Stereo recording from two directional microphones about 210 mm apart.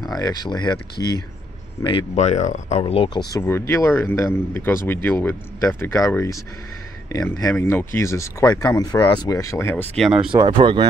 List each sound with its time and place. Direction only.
0.1 s speech: 20° left (ahead or behind)
1.8 s speech: 25° left (ahead or behind)
3.3 s speech: 10° left (ahead or behind)
10.3 s speech: 25° right (ahead or behind)